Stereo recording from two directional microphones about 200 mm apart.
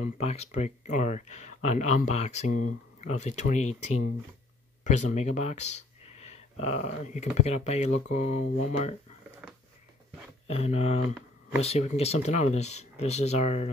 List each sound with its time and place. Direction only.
0.0 s speech: 30° left (ahead or behind)
10.5 s speech: 30° left (ahead or behind)